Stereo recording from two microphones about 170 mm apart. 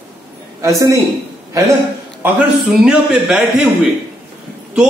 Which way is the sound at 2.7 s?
5° right (ahead or behind).